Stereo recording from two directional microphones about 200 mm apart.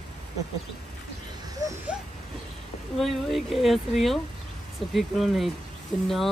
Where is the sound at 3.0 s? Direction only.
Centre (ahead or behind).